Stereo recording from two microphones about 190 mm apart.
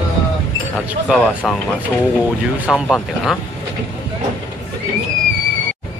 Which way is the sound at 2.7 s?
5° right (ahead or behind).